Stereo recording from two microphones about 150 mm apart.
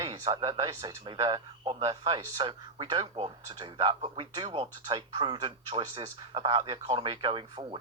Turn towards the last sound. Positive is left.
turn(degrees=-35)  # may be behind; listen again after turning